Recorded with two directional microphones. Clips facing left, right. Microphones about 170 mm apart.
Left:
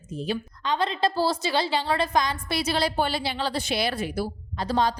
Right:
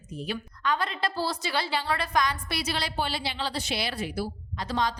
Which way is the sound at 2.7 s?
45° left (ahead or behind).